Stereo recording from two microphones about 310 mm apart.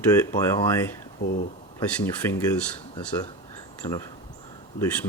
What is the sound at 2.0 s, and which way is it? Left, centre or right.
Speech, centre.